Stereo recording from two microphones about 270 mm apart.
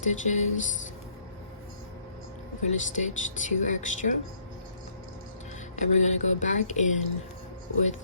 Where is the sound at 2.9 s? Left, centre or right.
Left.